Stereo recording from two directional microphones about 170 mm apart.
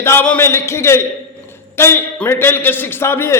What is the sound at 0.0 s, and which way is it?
A man's voice, 15° left (ahead or behind).